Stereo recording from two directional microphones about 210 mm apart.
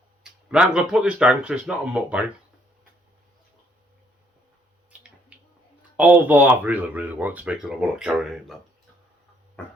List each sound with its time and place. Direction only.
0.2 s speech: 5° right (ahead or behind)
6.0 s speech: 10° right (ahead or behind)